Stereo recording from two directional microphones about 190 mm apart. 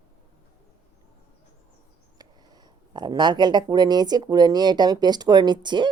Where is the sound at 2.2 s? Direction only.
20° right (ahead or behind).